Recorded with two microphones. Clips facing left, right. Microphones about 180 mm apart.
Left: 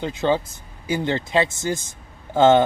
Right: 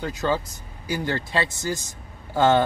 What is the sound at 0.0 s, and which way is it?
Speech, 25° left (ahead or behind).